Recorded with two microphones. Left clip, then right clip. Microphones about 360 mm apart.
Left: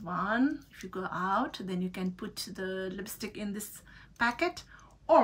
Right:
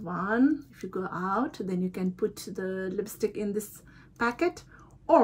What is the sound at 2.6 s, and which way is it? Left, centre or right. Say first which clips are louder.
Speech: right 3 dB; left.